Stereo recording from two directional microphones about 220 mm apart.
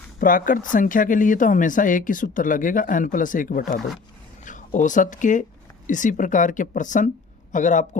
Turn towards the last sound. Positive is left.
turn(degrees=35)  # may be behind; listen again after turning